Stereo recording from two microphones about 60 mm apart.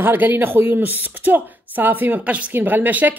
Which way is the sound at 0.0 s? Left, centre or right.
Right.